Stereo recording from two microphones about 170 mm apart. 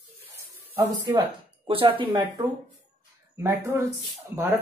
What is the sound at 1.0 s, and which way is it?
Speech, 25° right (ahead or behind).